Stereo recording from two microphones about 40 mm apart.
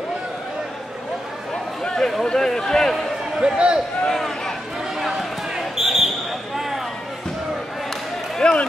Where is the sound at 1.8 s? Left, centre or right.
Centre.